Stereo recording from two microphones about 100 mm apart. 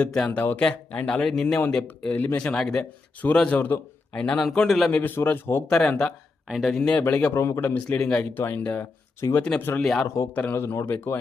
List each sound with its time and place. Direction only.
0.0 s speech: 10° left (ahead or behind)
1.6 s speech: 15° left (ahead or behind)
4.9 s speech: 15° left (ahead or behind)
5.6 s speech: 10° left (ahead or behind)
6.5 s speech: centre (ahead or behind); by 7.3 s 15° left (ahead or behind)
7.3 s speech: 30° left (ahead or behind)
7.6 s speech: 20° left (ahead or behind)
7.9 s speech: 10° left (ahead or behind)
8.2 s speech: 20° left (ahead or behind)
9.2 s speech: 35° left (ahead or behind)
9.6 s speech: 20° left (ahead or behind)
9.8 s speech: 5° left (ahead or behind)
10.3 s speech: 15° left (ahead or behind)
10.6 s speech: 25° left (ahead or behind)